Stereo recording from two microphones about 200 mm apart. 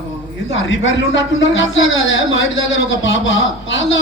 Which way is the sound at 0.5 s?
70° left (ahead or behind).